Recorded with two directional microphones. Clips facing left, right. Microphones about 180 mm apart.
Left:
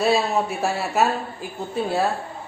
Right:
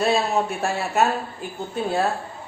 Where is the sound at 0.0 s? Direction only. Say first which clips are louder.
Left 1 dB; centre (ahead or behind).